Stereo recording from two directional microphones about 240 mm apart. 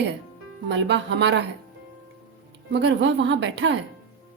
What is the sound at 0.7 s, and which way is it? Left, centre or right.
Speech, right.